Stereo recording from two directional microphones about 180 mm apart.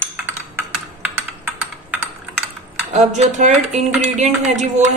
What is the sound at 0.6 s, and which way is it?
Computer keyboard, 10° right (ahead or behind).